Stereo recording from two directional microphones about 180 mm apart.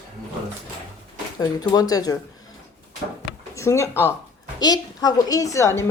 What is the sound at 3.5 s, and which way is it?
A woman's voice, 15° left (ahead or behind).